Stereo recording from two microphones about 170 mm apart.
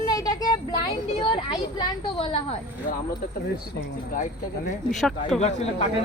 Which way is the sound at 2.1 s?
35° left (ahead or behind).